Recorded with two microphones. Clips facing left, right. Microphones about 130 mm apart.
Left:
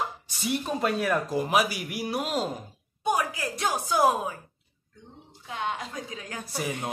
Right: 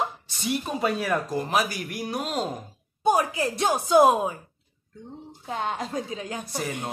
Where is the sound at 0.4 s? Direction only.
Centre (ahead or behind).